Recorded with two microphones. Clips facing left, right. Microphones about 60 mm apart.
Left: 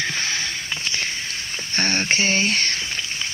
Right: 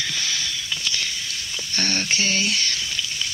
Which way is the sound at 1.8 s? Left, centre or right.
Left.